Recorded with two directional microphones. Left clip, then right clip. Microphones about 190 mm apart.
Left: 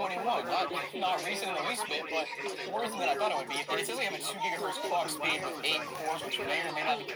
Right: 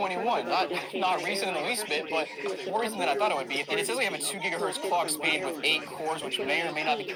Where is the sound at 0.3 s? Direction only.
15° left (ahead or behind).